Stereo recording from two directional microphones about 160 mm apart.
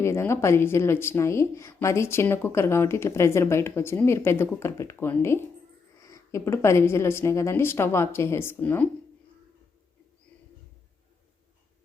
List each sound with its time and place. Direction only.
0.0 s a woman's voice: 15° left (ahead or behind)